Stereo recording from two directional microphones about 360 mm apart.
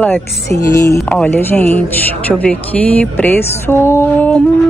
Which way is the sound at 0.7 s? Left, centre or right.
Centre.